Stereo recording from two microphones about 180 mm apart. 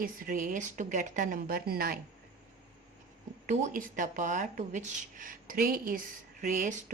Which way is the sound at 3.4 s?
45° right (ahead or behind).